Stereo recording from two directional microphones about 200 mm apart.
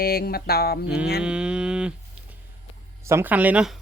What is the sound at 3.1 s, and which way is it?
Speech, 10° right (ahead or behind).